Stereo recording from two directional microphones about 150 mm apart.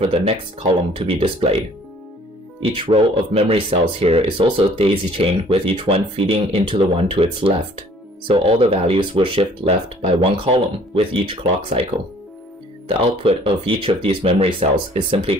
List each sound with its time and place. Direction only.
0.0 s speech: 40° right (ahead or behind)
2.6 s speech: 40° right (ahead or behind)